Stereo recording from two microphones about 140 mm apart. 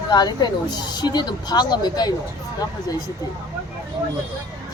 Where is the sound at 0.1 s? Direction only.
30° left (ahead or behind).